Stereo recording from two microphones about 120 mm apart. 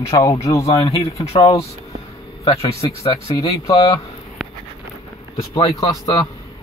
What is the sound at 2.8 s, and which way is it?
Speech, 45° left (ahead or behind).